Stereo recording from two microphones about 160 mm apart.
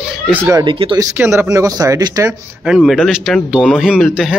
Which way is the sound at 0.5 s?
20° right (ahead or behind).